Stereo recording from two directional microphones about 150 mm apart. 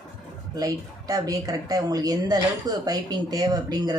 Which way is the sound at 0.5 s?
25° right (ahead or behind).